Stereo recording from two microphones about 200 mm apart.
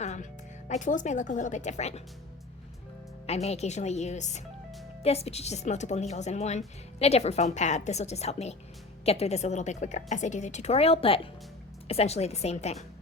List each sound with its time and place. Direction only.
0.0 s music: 35° left (ahead or behind)
0.7 s a woman's voice: 40° left (ahead or behind)
3.2 s a woman's voice: 30° left (ahead or behind)